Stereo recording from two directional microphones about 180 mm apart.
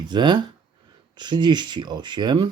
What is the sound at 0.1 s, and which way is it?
Speech, 25° right (ahead or behind).